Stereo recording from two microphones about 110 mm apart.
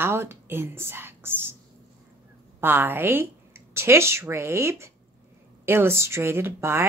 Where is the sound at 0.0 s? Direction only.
20° right (ahead or behind).